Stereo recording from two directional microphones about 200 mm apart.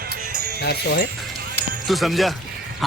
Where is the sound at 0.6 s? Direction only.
55° left (ahead or behind).